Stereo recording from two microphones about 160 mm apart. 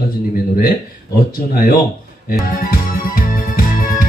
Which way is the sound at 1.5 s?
65° left (ahead or behind).